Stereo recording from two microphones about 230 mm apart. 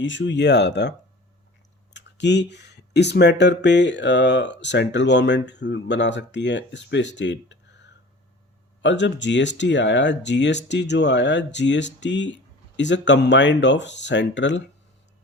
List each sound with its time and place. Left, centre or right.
0.0 s speech: left
8.8 s speech: left